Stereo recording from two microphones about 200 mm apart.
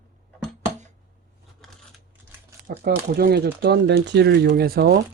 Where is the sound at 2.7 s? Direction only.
50° right (ahead or behind).